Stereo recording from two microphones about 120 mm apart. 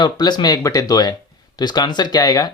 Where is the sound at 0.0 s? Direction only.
35° left (ahead or behind).